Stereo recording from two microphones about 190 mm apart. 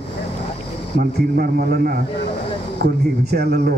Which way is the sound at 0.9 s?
55° right (ahead or behind).